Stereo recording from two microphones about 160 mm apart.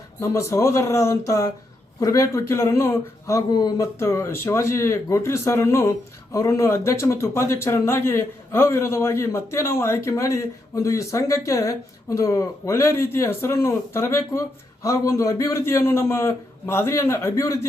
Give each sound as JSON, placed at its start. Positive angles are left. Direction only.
{"t": 0.2, "sound": "speech", "side_deg": 20}